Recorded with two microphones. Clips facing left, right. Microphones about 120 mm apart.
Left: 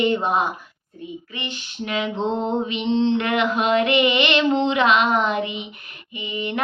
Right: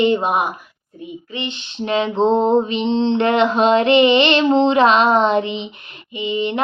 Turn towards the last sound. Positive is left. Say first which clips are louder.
# right 6 dB
turn(degrees=-20)  # may be behind; listen again after turning